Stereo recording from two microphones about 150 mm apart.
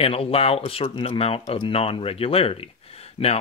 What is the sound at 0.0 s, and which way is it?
Speech, 40° left (ahead or behind).